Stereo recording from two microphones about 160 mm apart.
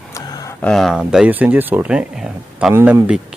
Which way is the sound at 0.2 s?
20° left (ahead or behind).